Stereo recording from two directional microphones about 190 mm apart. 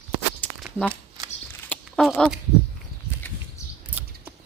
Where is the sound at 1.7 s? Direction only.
Centre (ahead or behind).